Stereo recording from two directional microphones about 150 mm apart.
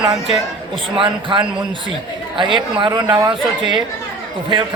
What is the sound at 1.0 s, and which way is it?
A man's voice, 35° right (ahead or behind).